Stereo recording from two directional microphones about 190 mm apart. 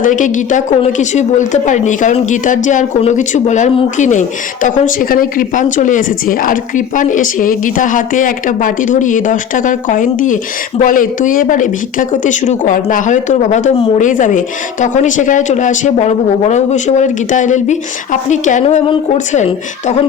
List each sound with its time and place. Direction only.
0.0 s a woman's voice: 45° left (ahead or behind)